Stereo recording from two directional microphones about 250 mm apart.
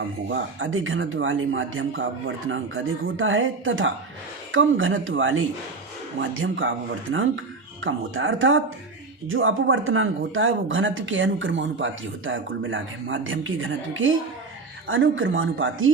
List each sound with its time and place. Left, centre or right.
0.3 s speech: right